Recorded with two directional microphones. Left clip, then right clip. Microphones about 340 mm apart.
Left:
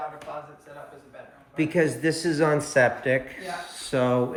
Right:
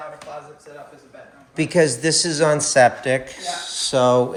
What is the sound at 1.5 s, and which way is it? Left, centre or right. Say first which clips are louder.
Speech: right 6 dB; centre.